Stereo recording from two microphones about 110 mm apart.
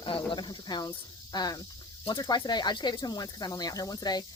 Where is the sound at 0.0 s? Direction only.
45° left (ahead or behind).